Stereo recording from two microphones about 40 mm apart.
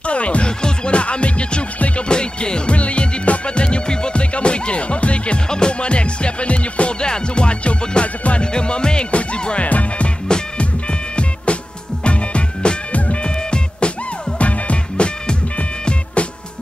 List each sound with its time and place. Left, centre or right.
0.0 s music: left
9.7 s music: left
10.2 s music: left